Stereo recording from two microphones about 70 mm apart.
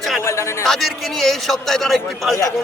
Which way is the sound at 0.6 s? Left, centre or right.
Centre.